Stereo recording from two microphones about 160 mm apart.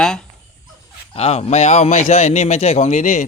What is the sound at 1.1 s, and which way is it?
A man's voice, 40° left (ahead or behind).